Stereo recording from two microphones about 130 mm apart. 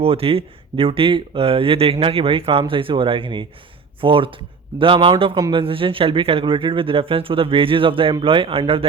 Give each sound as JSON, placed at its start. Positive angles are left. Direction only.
{"t": 0.0, "sound": "speech", "side_deg": -45}